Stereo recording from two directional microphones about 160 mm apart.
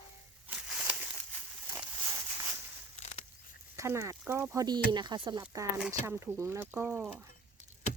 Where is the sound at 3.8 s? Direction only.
20° right (ahead or behind).